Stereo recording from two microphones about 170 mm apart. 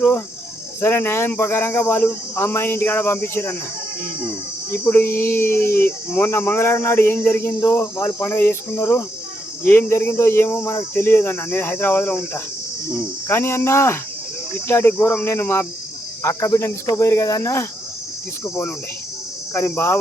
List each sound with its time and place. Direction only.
0.8 s speech: 15° left (ahead or behind)
4.7 s speech: 10° left (ahead or behind)